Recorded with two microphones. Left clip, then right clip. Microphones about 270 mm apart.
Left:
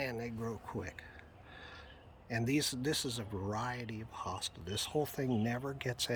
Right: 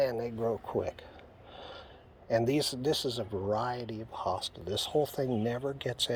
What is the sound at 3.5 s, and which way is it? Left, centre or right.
Speech, left.